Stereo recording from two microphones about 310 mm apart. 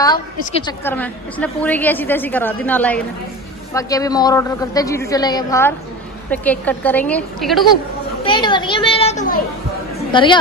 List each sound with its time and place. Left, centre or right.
0.0 s a woman's voice: centre
8.2 s a child's voice: centre